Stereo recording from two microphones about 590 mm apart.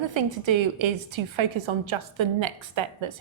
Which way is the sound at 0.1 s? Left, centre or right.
Right.